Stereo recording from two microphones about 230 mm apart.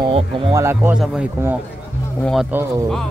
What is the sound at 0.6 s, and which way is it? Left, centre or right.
Speech, centre.